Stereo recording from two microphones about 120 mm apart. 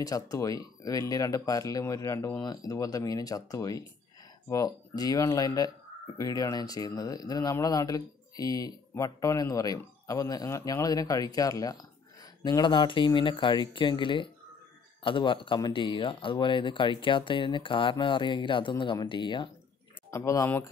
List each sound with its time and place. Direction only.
0.0 s speech: 30° left (ahead or behind)
20.1 s speech: 25° left (ahead or behind)